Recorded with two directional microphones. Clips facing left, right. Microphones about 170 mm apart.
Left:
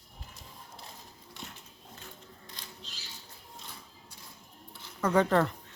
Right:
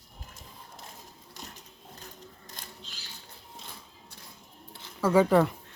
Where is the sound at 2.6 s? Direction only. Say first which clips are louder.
Right 3 dB; 50° right (ahead or behind).